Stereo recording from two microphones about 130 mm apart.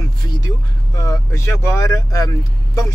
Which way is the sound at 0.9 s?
25° left (ahead or behind).